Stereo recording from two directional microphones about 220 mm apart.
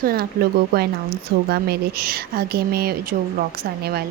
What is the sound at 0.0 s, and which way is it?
Speech, 45° right (ahead or behind).